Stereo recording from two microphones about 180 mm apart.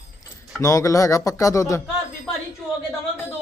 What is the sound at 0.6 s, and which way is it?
Speech, 20° left (ahead or behind).